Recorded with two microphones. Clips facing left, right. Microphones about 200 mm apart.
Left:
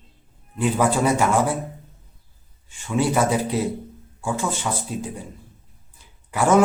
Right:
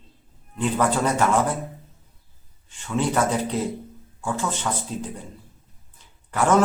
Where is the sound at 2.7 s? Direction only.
10° left (ahead or behind).